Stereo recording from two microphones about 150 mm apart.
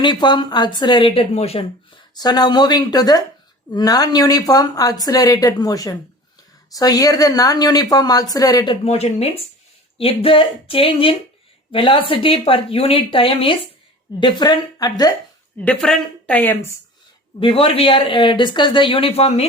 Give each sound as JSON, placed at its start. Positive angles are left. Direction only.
{"t": 0.0, "sound": "speech", "side_deg": 30}
{"t": 2.1, "sound": "a woman's voice", "side_deg": 25}
{"t": 15.6, "sound": "a woman's voice", "side_deg": 5}
{"t": 17.4, "sound": "speech", "side_deg": 35}